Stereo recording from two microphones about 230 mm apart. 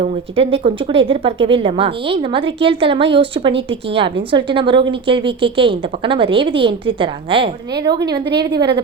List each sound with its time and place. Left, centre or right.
0.0 s a woman's voice: right